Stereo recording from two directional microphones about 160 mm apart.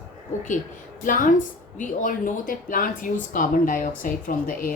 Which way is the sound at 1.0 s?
55° left (ahead or behind).